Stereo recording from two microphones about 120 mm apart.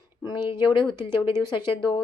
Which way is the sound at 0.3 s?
40° left (ahead or behind).